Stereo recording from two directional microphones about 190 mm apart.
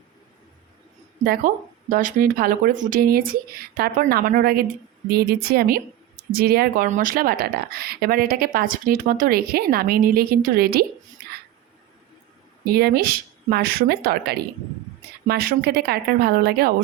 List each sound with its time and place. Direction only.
1.9 s a woman's voice: 45° right (ahead or behind)
6.8 s a woman's voice: 45° right (ahead or behind)
12.6 s a woman's voice: 55° right (ahead or behind)